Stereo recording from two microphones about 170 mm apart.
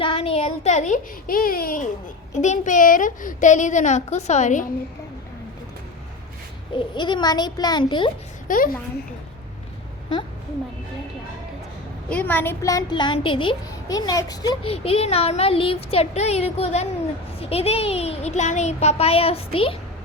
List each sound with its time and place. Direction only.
0.0 s a woman's voice: 35° left (ahead or behind); by 1.9 s 55° left (ahead or behind)
2.3 s a woman's voice: 45° left (ahead or behind)
6.7 s a child's voice: 25° left (ahead or behind)
8.4 s a woman's voice: 50° left (ahead or behind)
12.0 s a woman's voice: 10° left (ahead or behind); by 19.7 s 35° left (ahead or behind)